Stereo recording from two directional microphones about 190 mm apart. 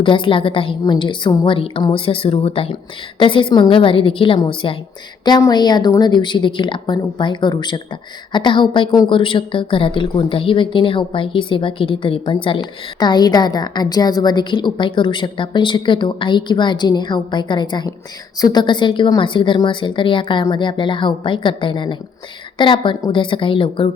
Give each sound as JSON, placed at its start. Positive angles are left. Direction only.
{"t": 0.0, "sound": "a woman's voice", "side_deg": 25}